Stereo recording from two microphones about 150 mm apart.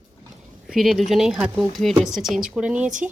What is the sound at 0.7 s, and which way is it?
Speech, centre (ahead or behind).